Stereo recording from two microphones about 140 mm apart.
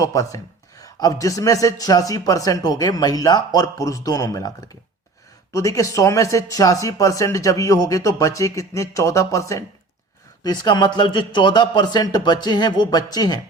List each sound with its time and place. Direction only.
0.0 s speech: 25° left (ahead or behind)